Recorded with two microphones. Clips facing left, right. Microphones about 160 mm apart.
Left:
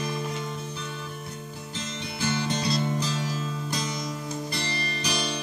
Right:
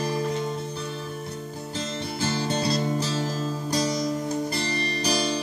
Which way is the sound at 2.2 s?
40° right (ahead or behind).